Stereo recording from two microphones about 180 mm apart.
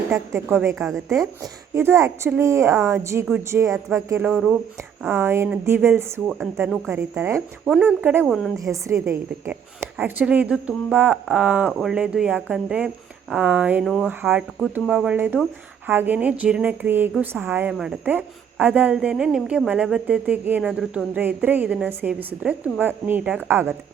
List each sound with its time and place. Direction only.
0.1 s a woman's voice: 15° right (ahead or behind)
0.8 s a woman's voice: centre (ahead or behind)
1.7 s a woman's voice: 15° right (ahead or behind)
6.8 s a woman's voice: 10° right (ahead or behind)